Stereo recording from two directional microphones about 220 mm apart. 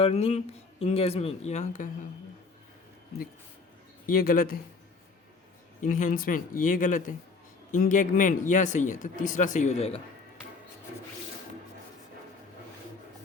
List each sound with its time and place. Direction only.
0.0 s speech: 30° left (ahead or behind)
4.0 s a man's voice: 40° left (ahead or behind)
5.8 s a man's voice: 35° left (ahead or behind)